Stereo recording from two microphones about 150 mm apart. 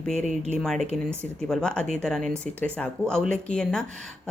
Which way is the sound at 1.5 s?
5° left (ahead or behind).